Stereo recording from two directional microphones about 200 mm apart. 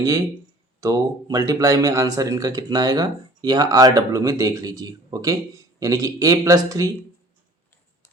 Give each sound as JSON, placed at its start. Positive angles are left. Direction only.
{"t": 0.8, "sound": "speech", "side_deg": -15}